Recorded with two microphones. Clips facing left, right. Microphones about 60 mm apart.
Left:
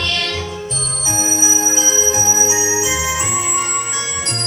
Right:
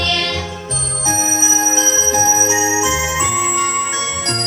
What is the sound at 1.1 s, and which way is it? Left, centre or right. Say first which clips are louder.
Music: right 2 dB; right.